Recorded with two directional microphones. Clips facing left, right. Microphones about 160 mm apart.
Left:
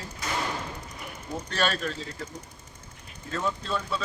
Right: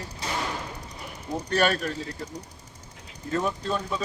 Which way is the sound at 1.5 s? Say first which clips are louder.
Right 4 dB; 15° right (ahead or behind).